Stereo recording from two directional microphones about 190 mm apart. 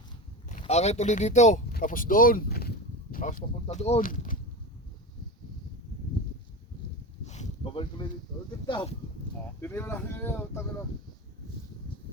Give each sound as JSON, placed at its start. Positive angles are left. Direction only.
{"t": 0.6, "sound": "speech", "side_deg": 35}
{"t": 7.3, "sound": "a sound", "side_deg": 35}
{"t": 7.6, "sound": "speech", "side_deg": 25}
{"t": 9.6, "sound": "speech", "side_deg": 10}